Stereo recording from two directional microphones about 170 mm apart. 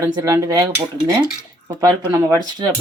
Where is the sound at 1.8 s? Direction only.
20° right (ahead or behind).